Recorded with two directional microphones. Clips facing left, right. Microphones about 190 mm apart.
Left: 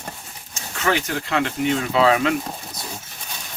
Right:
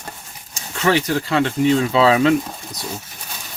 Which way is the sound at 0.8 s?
35° right (ahead or behind).